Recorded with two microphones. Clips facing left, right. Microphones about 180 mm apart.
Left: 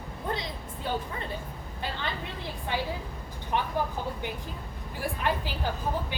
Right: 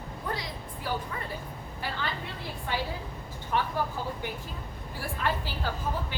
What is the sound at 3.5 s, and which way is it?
Speech, 20° left (ahead or behind).